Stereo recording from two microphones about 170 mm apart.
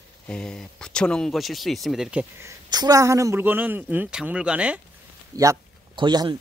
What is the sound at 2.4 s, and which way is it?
Speech, 20° right (ahead or behind).